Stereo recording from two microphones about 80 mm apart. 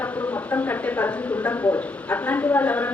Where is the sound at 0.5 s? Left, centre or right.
Left.